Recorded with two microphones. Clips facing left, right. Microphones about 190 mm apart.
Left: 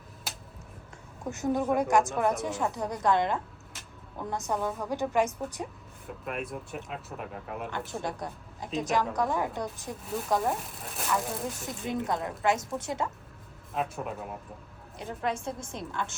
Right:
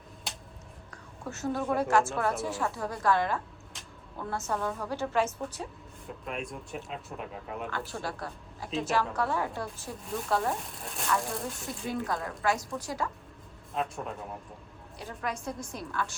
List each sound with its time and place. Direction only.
0.3 s a sound: 5° left (ahead or behind)
1.2 s a woman's voice: 15° left (ahead or behind)
6.1 s speech: 5° left (ahead or behind)
7.7 s a woman's voice: 20° left (ahead or behind)
10.4 s speech: centre (ahead or behind)
12.0 s a woman's voice: 20° left (ahead or behind)
13.7 s speech: centre (ahead or behind)
14.9 s a woman's voice: 25° left (ahead or behind)